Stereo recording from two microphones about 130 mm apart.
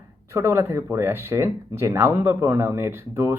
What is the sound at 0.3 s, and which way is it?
Speech, 20° right (ahead or behind).